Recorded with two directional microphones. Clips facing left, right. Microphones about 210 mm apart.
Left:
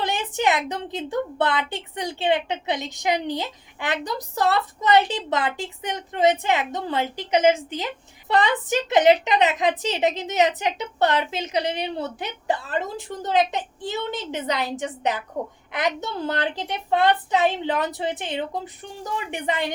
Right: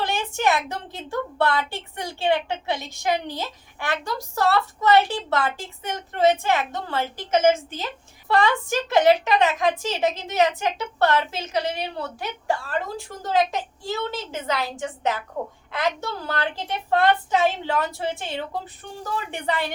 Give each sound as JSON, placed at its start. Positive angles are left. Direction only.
{"t": 0.0, "sound": "a woman's voice", "side_deg": 20}